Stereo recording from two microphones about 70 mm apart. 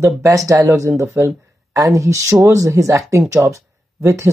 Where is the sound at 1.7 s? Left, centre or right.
Right.